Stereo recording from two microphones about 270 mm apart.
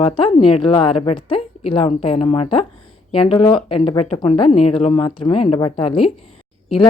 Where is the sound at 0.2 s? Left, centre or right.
Centre.